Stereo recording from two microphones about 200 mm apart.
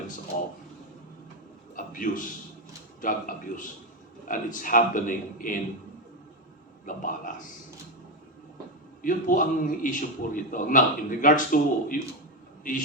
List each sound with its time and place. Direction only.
1.7 s a sound: 40° left (ahead or behind)
3.0 s a man's voice: 40° left (ahead or behind)
6.8 s speech: 40° left (ahead or behind)
9.0 s a man's voice: 40° left (ahead or behind)